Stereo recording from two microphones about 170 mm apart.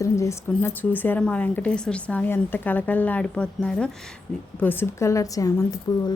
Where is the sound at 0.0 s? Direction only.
15° left (ahead or behind).